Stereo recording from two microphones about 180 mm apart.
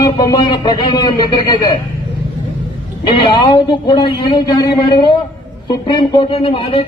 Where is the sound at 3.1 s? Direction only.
30° left (ahead or behind).